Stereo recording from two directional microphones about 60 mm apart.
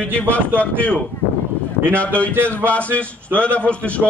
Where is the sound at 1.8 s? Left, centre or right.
Left.